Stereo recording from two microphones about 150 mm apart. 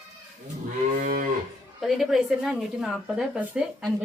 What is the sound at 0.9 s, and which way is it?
Moo, 65° right (ahead or behind).